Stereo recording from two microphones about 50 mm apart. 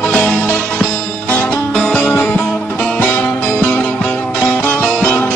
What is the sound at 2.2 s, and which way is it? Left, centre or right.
Music, left.